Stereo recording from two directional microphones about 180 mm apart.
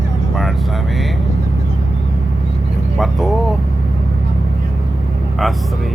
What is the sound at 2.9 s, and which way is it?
Music, centre (ahead or behind).